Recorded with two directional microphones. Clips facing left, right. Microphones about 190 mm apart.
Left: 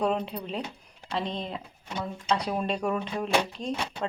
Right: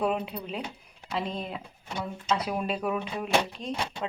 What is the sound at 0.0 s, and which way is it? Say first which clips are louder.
Speech: left 1 dB; 5° right (ahead or behind).